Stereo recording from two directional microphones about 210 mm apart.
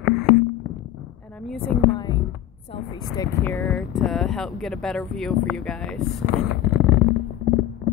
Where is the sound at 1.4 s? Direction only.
Centre (ahead or behind).